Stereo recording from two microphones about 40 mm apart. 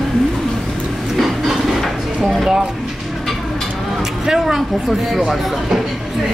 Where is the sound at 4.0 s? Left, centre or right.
Centre.